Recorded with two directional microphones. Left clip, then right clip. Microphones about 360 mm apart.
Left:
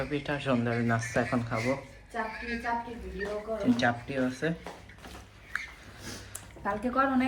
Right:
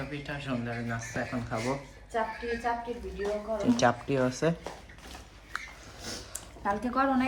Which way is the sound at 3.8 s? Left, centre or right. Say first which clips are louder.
Right 3 dB; centre.